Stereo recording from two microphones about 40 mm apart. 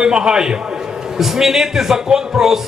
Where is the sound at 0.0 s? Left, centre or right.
Centre.